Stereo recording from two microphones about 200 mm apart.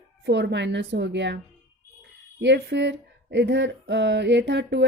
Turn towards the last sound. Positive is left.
turn(degrees=-60)  # may be behind; listen again after turning